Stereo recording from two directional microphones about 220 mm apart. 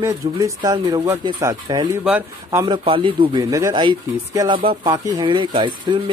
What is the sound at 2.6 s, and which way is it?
Speech, 20° right (ahead or behind).